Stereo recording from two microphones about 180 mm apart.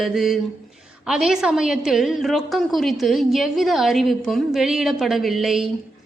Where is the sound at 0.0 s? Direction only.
Centre (ahead or behind).